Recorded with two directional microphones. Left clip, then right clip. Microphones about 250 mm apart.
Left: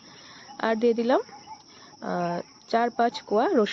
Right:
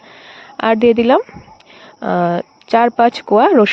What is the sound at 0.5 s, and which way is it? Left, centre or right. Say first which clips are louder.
Speech: right 12 dB; right.